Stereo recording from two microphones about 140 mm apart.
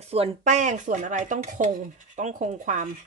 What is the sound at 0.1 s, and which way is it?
Speech, 50° right (ahead or behind).